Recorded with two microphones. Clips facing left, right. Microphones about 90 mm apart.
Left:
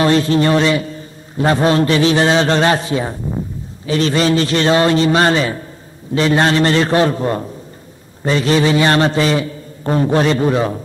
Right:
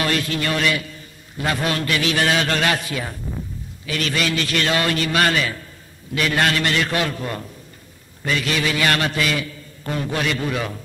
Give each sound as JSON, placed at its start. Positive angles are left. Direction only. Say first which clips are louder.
{"t": 0.0, "sound": "a man's voice", "louder": "left 9 dB", "side_deg": 30}